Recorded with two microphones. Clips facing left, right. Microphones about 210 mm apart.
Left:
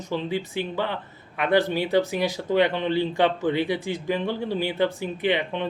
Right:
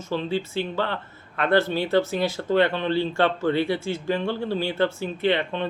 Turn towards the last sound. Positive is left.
turn(degrees=15)  # may be behind; listen again after turning